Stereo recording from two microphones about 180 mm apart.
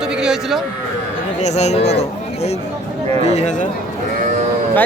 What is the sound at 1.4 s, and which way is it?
A man's voice, 40° left (ahead or behind).